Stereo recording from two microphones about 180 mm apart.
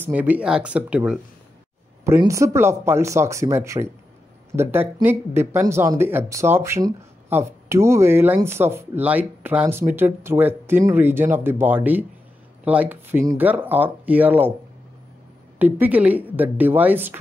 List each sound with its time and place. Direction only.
0.0 s speech: 10° right (ahead or behind)
2.0 s speech: 15° right (ahead or behind)
15.6 s speech: 10° right (ahead or behind)